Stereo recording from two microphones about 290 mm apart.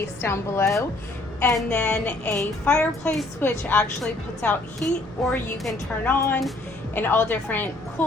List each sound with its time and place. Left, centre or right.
0.2 s a woman's voice: centre